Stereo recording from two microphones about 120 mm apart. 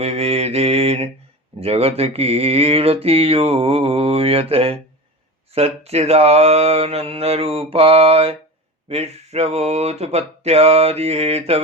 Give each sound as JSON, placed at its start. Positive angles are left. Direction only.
{"t": 0.0, "sound": "mantra", "side_deg": -60}